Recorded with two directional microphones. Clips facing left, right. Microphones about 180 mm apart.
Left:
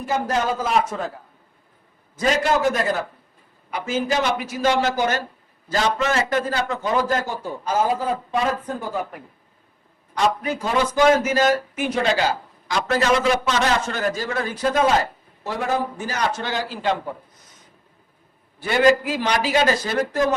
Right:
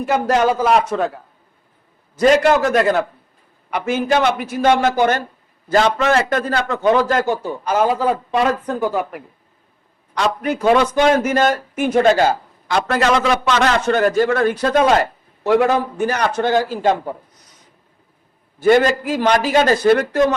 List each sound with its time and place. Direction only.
0.0 s a man's voice: 70° right (ahead or behind)
2.1 s a man's voice: 70° right (ahead or behind)
10.2 s a man's voice: 65° right (ahead or behind); by 17.0 s 50° right (ahead or behind)
18.6 s a man's voice: 50° right (ahead or behind)